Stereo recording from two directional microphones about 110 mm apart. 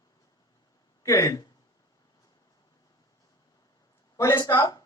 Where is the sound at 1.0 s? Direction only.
30° left (ahead or behind).